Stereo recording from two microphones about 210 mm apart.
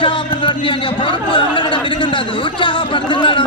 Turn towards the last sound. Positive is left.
turn(degrees=20)  # may be behind; listen again after turning